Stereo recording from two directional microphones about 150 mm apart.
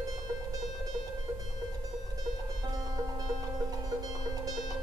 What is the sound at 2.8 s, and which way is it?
Music, 25° right (ahead or behind).